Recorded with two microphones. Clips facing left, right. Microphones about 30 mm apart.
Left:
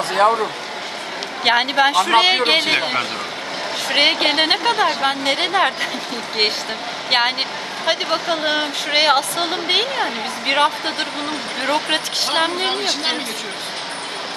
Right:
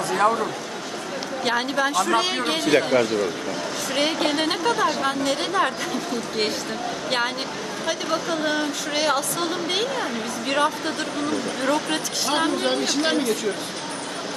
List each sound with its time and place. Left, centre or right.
1.4 s speech: left
7.1 s speech: left